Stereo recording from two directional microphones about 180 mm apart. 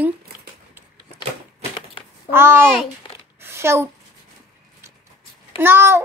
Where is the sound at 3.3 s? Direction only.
15° right (ahead or behind).